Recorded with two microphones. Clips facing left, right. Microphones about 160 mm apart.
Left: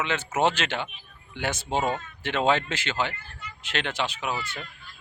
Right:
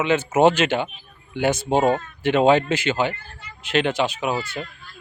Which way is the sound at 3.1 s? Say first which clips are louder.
Right 4 dB; 30° right (ahead or behind).